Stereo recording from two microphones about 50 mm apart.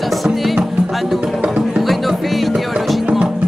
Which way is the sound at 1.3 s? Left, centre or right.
Right.